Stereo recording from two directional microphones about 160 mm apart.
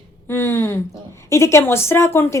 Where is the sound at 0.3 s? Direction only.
15° left (ahead or behind).